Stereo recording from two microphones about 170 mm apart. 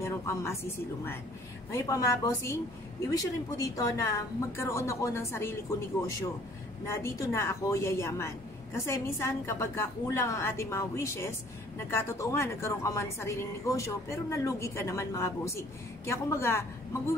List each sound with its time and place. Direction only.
0.0 s a woman's voice: 15° left (ahead or behind)